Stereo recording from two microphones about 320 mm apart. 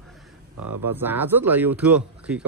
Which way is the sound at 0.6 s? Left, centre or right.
Right.